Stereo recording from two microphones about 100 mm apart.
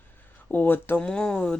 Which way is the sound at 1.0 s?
5° left (ahead or behind).